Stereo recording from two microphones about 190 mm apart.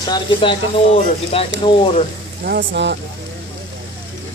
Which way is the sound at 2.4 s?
55° right (ahead or behind).